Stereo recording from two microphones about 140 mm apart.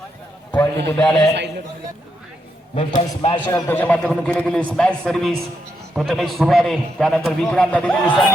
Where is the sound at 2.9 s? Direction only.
35° left (ahead or behind).